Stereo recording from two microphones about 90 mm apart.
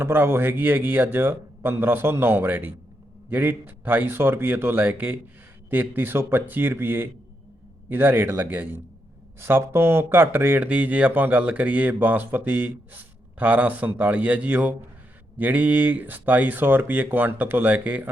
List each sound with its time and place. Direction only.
0.0 s speech: 25° right (ahead or behind)